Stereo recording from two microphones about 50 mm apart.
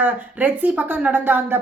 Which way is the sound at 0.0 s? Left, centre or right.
Right.